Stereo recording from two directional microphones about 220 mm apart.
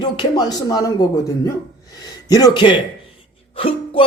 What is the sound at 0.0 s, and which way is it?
Speech, 20° left (ahead or behind).